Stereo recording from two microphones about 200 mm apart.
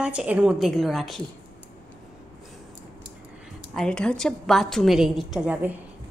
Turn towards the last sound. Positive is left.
turn(degrees=-5)  # may be behind; listen again after turning